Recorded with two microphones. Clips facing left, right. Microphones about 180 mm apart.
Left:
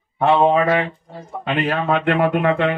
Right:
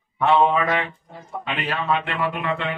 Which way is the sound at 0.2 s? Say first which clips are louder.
Left 3 dB; 35° left (ahead or behind).